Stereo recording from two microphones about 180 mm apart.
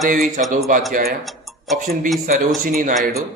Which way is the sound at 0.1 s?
50° right (ahead or behind).